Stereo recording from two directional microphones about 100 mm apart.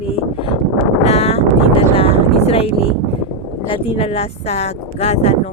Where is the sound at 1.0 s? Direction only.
90° left.